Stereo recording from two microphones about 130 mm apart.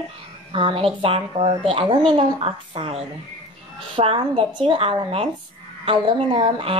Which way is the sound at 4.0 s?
45° right (ahead or behind).